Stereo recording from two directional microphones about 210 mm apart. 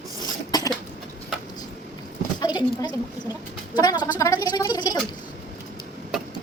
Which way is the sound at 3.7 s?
20° left (ahead or behind).